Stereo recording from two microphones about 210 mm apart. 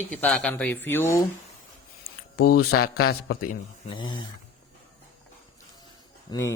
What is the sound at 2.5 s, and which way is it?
Speech, 50° left (ahead or behind).